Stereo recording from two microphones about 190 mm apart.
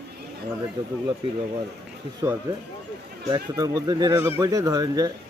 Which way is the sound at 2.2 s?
20° right (ahead or behind).